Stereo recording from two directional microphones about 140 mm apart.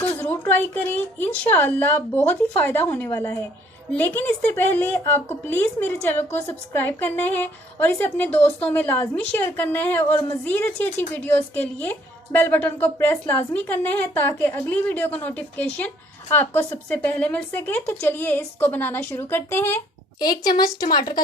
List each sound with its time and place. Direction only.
0.2 s a woman's voice: 15° left (ahead or behind)
20.1 s a woman's voice: 30° left (ahead or behind)